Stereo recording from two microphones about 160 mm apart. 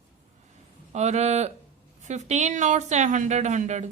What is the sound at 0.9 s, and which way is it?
A woman's voice, 45° right (ahead or behind).